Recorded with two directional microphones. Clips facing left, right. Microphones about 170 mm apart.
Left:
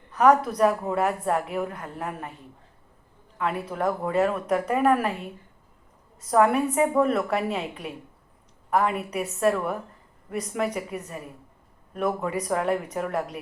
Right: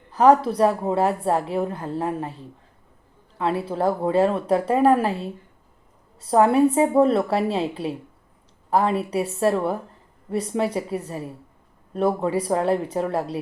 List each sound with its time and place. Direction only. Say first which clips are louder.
0.1 s a woman's voice: right 3 dB; 30° right (ahead or behind)